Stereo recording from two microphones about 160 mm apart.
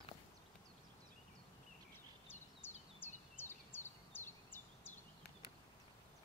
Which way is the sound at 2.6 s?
15° left (ahead or behind).